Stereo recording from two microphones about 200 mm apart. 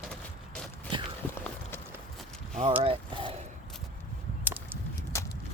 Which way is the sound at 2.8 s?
25° right (ahead or behind).